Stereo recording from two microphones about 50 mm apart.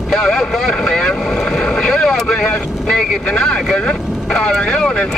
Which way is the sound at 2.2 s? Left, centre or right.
Centre.